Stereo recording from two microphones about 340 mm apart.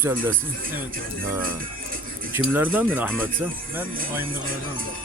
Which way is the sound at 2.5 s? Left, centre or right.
Centre.